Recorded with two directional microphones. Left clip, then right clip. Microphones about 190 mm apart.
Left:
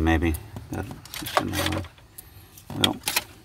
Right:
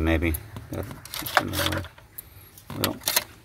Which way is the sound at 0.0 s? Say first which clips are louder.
Left 1 dB; 10° left (ahead or behind).